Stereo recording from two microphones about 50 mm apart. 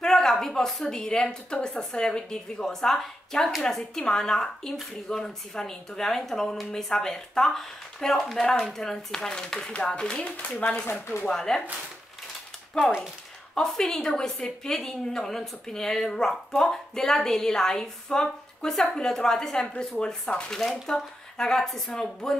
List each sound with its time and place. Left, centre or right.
0.0 s a woman's voice: centre; by 10.5 s left
10.9 s speech: left
11.2 s a woman's voice: centre
12.7 s a woman's voice: centre